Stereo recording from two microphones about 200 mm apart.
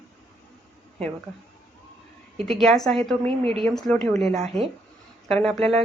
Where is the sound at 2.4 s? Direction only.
Centre (ahead or behind).